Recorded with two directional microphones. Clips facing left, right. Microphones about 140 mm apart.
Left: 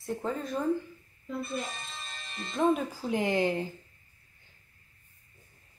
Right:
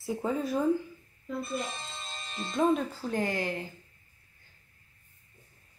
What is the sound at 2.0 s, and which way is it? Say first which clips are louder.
Music: right 3 dB; 25° right (ahead or behind).